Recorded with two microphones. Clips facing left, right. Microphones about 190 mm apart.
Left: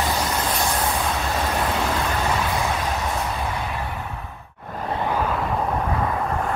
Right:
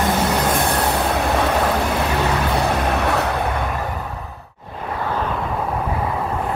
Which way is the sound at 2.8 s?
70° right (ahead or behind).